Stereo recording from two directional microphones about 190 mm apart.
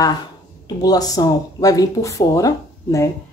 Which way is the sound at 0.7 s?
20° left (ahead or behind).